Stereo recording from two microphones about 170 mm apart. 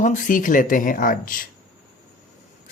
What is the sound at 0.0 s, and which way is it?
Speech, 50° left (ahead or behind).